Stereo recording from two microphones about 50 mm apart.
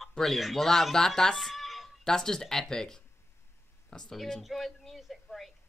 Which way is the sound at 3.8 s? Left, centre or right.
Centre.